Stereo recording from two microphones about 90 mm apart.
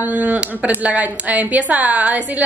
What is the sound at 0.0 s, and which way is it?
A woman's voice, 15° right (ahead or behind).